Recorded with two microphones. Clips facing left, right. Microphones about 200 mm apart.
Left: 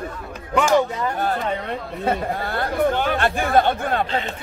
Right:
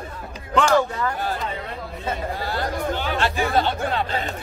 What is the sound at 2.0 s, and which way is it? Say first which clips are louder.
Speech: left 4 dB; 55° left (ahead or behind).